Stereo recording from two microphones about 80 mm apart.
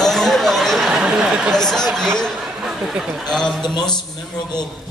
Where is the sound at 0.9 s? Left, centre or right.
Centre.